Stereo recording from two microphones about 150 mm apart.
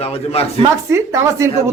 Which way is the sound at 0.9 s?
20° right (ahead or behind).